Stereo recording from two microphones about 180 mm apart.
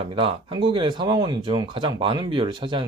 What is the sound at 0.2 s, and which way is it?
Speech, 30° right (ahead or behind).